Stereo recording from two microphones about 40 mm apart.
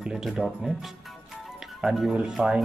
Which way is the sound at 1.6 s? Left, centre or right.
Centre.